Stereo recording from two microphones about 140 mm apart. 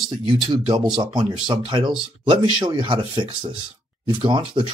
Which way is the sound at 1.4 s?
35° right (ahead or behind).